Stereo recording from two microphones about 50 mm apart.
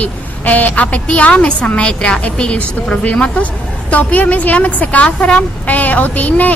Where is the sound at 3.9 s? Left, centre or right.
Left.